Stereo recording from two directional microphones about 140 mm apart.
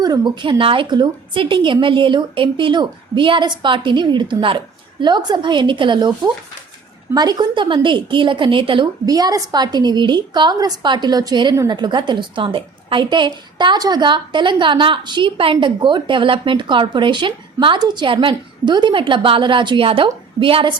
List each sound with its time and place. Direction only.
0.0 s a woman's voice: 30° right (ahead or behind)